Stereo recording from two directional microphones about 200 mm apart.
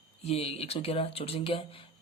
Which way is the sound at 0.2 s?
30° left (ahead or behind).